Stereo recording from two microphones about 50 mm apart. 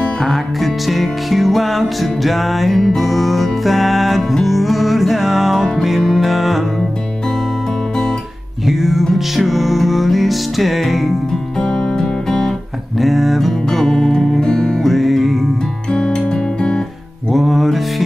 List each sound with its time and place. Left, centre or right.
0.0 s music: centre
0.6 s music: centre
8.6 s music: centre
11.5 s music: centre
14.8 s music: centre
15.9 s music: centre
17.3 s music: centre